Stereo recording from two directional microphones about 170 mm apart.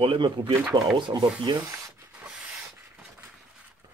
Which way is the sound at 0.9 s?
25° right (ahead or behind).